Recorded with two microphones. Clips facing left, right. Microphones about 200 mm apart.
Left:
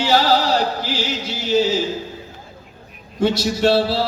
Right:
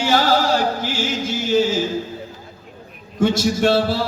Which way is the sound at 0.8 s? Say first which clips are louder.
Right 1 dB; 50° right (ahead or behind).